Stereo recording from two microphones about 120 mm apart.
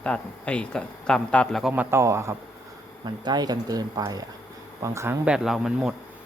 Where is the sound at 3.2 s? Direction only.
35° right (ahead or behind).